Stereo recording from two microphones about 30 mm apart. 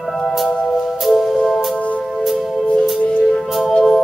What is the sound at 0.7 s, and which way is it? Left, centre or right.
Music, centre.